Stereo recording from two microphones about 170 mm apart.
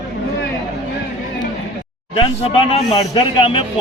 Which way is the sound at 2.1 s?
35° left (ahead or behind).